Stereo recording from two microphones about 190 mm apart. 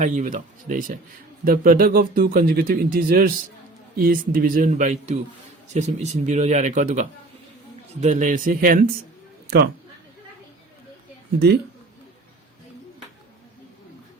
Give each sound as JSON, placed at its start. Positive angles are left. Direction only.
{"t": 0.0, "sound": "speech", "side_deg": -40}
{"t": 9.5, "sound": "a woman's voice", "side_deg": -60}
{"t": 11.3, "sound": "a woman's voice", "side_deg": -60}